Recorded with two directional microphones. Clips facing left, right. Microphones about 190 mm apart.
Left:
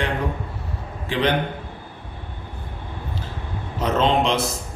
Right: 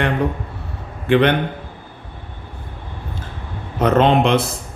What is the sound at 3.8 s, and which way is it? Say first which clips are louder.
Speech: right 5 dB; 60° right (ahead or behind).